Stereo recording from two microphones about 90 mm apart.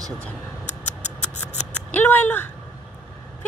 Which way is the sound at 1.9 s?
20° left (ahead or behind).